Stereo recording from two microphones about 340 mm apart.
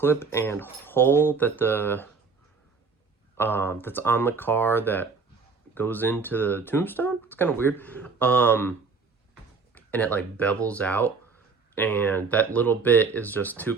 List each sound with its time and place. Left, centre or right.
0.0 s speech: centre
3.3 s speech: centre
9.7 s speech: centre